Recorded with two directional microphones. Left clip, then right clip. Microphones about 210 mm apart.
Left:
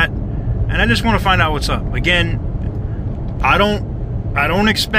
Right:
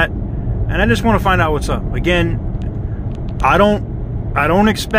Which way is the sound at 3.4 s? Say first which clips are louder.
Right 2 dB; 40° right (ahead or behind).